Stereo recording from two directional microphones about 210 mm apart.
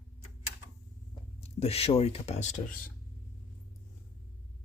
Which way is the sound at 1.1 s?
30° left (ahead or behind).